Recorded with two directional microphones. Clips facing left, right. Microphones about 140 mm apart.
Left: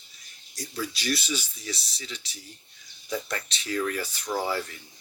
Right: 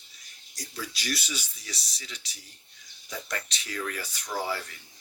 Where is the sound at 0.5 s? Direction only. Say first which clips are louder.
Left 5 dB; 30° left (ahead or behind).